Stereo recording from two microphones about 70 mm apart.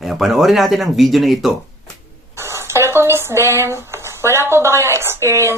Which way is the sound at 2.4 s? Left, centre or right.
Right.